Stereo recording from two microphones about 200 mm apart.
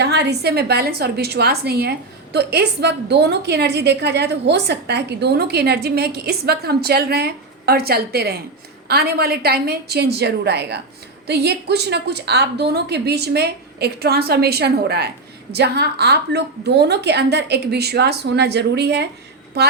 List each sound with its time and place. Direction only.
0.0 s a woman's voice: 55° right (ahead or behind)